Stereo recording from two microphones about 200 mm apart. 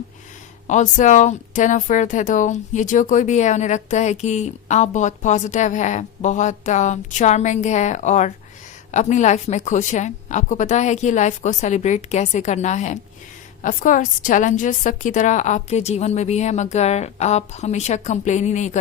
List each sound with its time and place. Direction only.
0.7 s speech: 40° left (ahead or behind)